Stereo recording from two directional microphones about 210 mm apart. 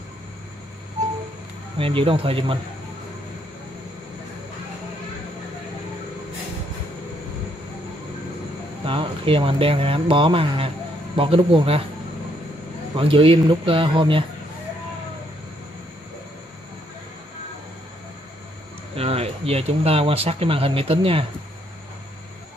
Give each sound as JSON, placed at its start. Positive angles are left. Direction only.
{"t": 1.8, "sound": "a man's voice", "side_deg": -25}
{"t": 8.8, "sound": "a man's voice", "side_deg": -25}
{"t": 12.9, "sound": "a man's voice", "side_deg": -25}
{"t": 18.9, "sound": "speech", "side_deg": -30}